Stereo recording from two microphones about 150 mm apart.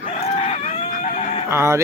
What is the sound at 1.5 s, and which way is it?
Speech, 15° right (ahead or behind).